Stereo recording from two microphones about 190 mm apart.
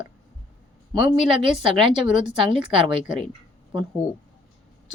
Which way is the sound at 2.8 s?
25° right (ahead or behind).